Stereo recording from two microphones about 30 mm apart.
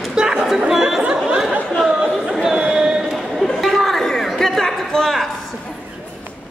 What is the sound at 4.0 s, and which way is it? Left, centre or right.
Chatter, centre.